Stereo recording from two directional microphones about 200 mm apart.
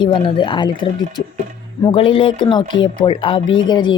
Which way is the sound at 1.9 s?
25° left (ahead or behind).